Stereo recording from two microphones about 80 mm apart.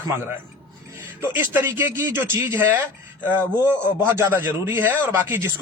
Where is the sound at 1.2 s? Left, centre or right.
Right.